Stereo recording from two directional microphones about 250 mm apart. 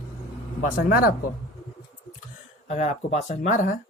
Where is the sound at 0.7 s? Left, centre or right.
Left.